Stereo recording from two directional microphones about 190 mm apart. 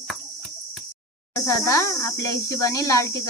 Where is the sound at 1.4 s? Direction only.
15° left (ahead or behind).